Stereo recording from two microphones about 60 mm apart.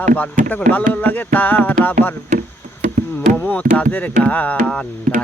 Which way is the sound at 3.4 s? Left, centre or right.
Left.